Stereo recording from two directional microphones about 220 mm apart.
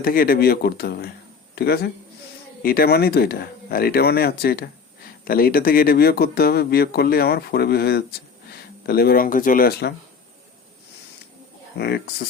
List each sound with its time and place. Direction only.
0.0 s speech: 40° left (ahead or behind)
11.8 s speech: 50° left (ahead or behind)